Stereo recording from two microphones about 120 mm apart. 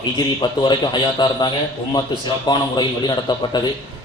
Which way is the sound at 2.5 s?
35° left (ahead or behind).